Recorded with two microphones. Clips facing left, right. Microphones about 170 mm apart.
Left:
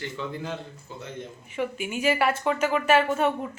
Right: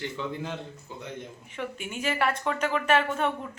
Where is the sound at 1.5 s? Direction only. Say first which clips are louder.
Left 7 dB; 5° left (ahead or behind).